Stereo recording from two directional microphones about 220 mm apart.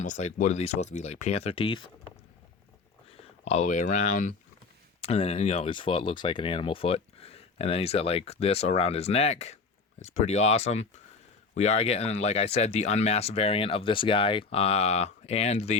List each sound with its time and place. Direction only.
0.0 s speech: 35° left (ahead or behind)
3.1 s speech: 30° left (ahead or behind)